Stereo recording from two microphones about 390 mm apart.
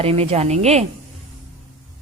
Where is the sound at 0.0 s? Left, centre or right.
Centre.